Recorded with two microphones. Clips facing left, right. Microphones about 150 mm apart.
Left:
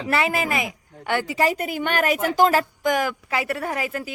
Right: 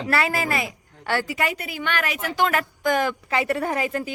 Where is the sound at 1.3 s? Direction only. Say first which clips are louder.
Left 5 dB; 35° left (ahead or behind).